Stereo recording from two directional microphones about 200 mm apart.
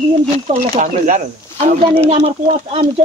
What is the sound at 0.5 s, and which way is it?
Speech, 35° right (ahead or behind).